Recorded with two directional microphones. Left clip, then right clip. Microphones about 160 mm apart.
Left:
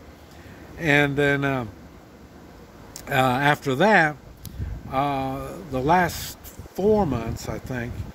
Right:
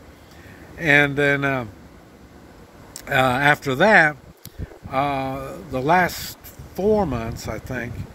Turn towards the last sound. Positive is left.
turn(degrees=-5)  # may be behind; listen again after turning